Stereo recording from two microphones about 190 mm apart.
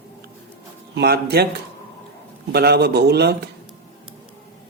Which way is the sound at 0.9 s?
55° right (ahead or behind).